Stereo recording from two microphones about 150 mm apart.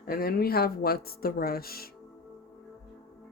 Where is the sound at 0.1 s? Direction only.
90° left.